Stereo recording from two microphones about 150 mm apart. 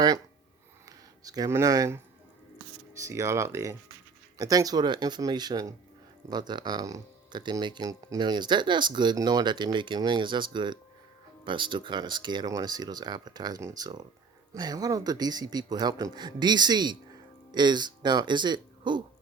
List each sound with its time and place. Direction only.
0.9 s speech: 25° right (ahead or behind)